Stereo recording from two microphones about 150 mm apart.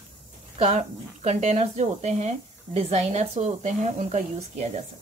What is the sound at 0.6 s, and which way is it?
Speech, 45° right (ahead or behind).